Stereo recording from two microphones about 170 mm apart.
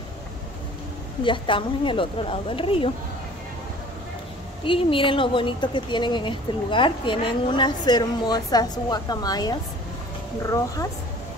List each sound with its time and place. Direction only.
1.2 s speech: 30° left (ahead or behind)
4.6 s a woman's voice: 30° left (ahead or behind)